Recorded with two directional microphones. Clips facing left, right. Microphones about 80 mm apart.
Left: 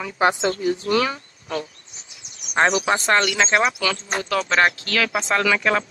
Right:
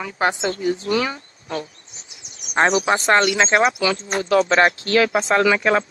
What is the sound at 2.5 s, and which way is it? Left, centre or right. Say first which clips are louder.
Speech: right 1 dB; right.